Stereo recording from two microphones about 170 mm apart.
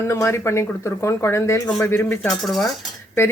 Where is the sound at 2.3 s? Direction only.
Centre (ahead or behind).